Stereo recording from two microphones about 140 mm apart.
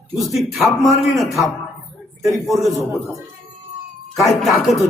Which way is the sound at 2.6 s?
20° right (ahead or behind).